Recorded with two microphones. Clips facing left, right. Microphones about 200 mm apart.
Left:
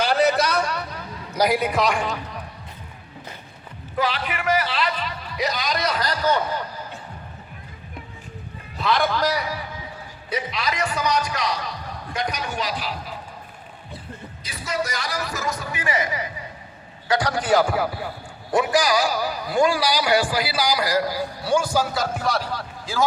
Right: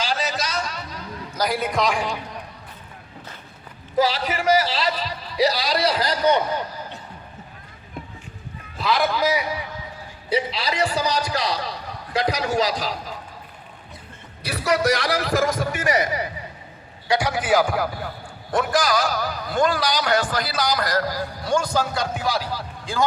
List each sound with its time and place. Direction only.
0.0 s a sound: 60° left (ahead or behind)
1.5 s a man's voice: 5° left (ahead or behind)
3.9 s a man's voice: 40° right (ahead or behind); by 6.4 s 20° right (ahead or behind)
8.8 s a man's voice: centre (ahead or behind)
10.2 s a man's voice: 30° right (ahead or behind)
14.4 s a man's voice: 65° right (ahead or behind); by 16.3 s 45° right (ahead or behind)
17.1 s a man's voice: 10° right (ahead or behind)